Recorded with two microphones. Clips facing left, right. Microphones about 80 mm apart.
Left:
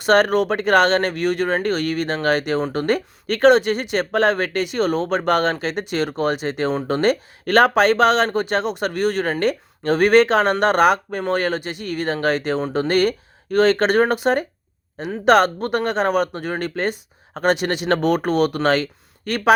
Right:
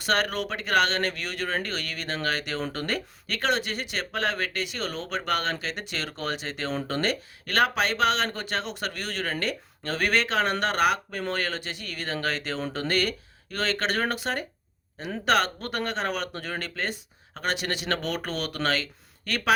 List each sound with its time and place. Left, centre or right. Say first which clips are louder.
0.0 s speech: left 11 dB; left